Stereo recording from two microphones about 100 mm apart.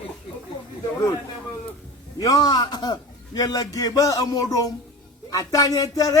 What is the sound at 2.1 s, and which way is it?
Speech, 45° left (ahead or behind).